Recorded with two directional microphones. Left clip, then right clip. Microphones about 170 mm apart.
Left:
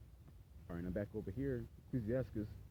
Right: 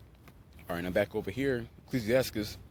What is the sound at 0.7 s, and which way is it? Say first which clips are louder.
Speech: right 14 dB; 20° right (ahead or behind).